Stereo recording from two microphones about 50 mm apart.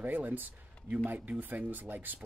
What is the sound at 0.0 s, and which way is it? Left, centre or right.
Speech, right.